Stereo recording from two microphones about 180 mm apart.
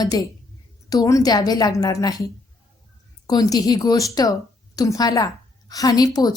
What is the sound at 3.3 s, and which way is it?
A woman's voice, 20° left (ahead or behind).